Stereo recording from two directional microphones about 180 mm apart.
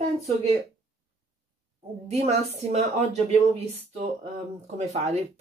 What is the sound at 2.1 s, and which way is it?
Speech, 35° right (ahead or behind).